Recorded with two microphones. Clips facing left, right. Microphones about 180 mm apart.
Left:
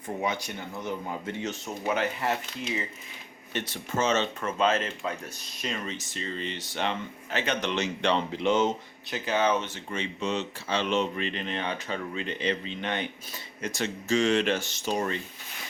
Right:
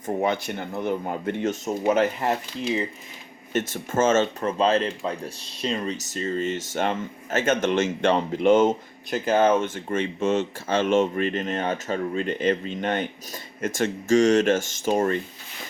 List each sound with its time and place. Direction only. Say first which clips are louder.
0.0 s speech: right 6 dB; 55° right (ahead or behind)
4.4 s speech: right 5 dB; 35° right (ahead or behind)